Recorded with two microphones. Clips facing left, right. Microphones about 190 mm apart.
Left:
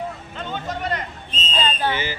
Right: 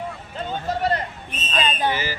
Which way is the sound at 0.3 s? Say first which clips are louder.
Right 4 dB; 35° right (ahead or behind).